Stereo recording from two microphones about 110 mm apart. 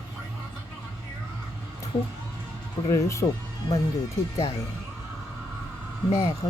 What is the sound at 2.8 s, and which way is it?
Speech, 30° left (ahead or behind).